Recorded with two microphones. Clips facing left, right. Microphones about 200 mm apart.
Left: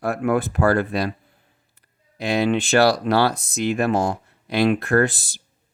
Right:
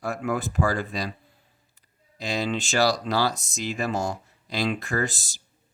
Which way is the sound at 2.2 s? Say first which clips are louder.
Left 7 dB; 60° left (ahead or behind).